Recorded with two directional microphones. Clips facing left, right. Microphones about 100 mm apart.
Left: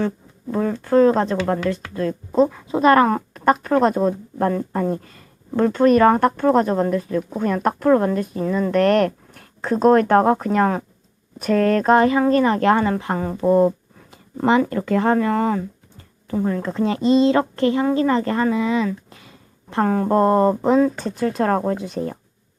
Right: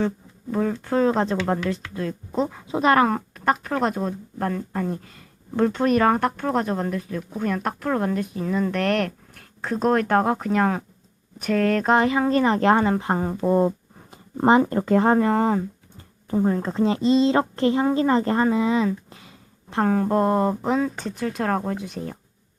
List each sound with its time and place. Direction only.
0.5 s speech: centre (ahead or behind)
2.5 s speech: 10° right (ahead or behind); by 5.0 s 5° left (ahead or behind)
5.1 s a sound: centre (ahead or behind)
5.7 s speech: 10° right (ahead or behind)
7.2 s speech: 15° left (ahead or behind)
7.4 s speech: 5° left (ahead or behind); by 13.3 s 15° right (ahead or behind)
13.3 s speech: centre (ahead or behind)
14.3 s speech: 30° right (ahead or behind)
19.7 s speech: centre (ahead or behind)